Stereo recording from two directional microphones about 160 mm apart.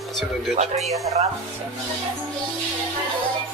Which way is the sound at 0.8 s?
Centre (ahead or behind).